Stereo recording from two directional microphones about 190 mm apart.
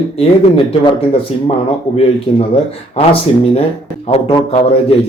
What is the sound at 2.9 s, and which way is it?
A man's voice, 30° left (ahead or behind).